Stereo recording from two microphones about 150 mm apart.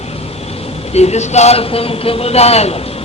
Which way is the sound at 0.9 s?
45° left (ahead or behind).